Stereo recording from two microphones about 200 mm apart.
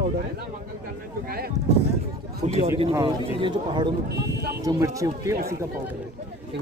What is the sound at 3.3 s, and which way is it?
Speech, 25° right (ahead or behind).